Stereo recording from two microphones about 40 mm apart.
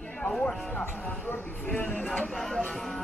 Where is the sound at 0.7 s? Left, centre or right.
Left.